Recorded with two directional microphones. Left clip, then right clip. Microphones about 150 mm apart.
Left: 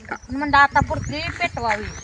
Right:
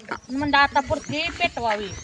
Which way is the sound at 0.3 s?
5° right (ahead or behind).